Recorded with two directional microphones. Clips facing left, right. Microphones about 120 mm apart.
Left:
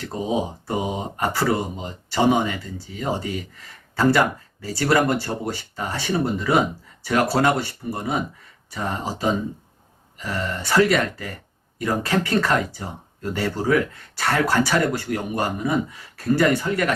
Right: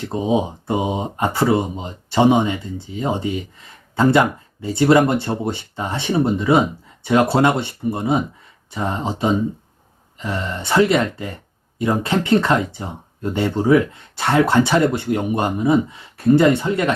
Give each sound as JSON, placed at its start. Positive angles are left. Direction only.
{"t": 0.0, "sound": "speech", "side_deg": -25}